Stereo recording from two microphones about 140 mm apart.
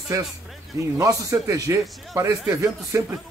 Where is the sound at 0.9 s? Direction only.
20° right (ahead or behind).